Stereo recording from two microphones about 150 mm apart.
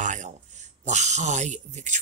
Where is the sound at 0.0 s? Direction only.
55° right (ahead or behind).